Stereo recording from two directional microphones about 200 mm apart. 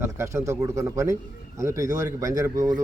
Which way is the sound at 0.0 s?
10° right (ahead or behind).